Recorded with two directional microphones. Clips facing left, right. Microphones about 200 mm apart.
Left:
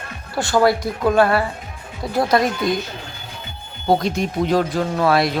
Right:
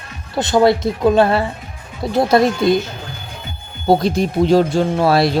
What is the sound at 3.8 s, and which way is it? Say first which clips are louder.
Speech: right 4 dB; 30° right (ahead or behind).